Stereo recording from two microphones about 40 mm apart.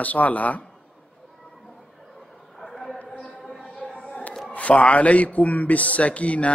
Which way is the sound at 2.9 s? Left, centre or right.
Left.